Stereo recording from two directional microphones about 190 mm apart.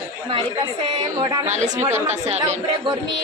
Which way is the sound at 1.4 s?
40° right (ahead or behind).